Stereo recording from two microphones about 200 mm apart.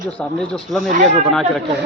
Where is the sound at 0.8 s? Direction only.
40° right (ahead or behind).